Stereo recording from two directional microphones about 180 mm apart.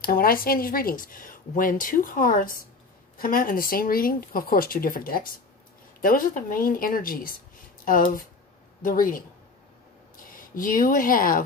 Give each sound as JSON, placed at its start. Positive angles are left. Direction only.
{"t": 0.0, "sound": "speech", "side_deg": 55}